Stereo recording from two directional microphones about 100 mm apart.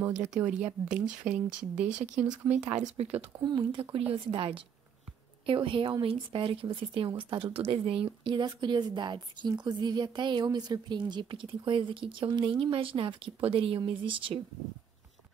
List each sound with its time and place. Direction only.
0.0 s speech: 25° right (ahead or behind)
0.8 s speech: 15° right (ahead or behind)
3.0 s speech: 90° right
3.4 s speech: 50° right (ahead or behind)
3.9 s speech: 65° right (ahead or behind)
7.5 s speech: 75° right (ahead or behind)